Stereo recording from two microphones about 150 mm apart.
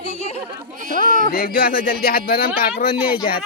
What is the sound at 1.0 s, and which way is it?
Speech, 65° right (ahead or behind).